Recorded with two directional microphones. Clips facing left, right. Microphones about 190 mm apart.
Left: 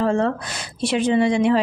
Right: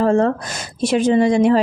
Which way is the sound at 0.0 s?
40° right (ahead or behind).